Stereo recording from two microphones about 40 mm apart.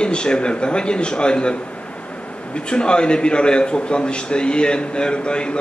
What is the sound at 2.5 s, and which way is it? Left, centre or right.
A man's voice, left.